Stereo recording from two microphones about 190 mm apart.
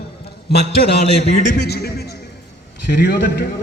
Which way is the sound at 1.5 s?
60° left (ahead or behind).